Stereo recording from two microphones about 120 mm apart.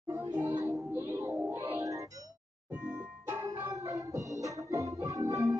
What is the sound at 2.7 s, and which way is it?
Music, 15° right (ahead or behind).